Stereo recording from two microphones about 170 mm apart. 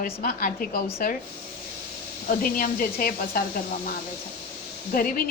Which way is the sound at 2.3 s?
55° left (ahead or behind).